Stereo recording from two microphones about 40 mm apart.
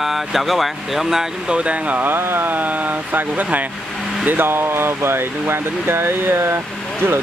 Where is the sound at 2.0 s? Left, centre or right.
Right.